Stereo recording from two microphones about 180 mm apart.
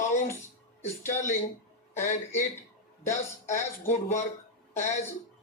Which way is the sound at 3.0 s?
45° left (ahead or behind).